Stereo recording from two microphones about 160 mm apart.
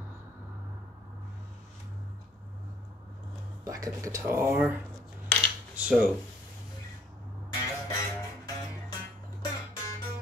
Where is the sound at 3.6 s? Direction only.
20° right (ahead or behind).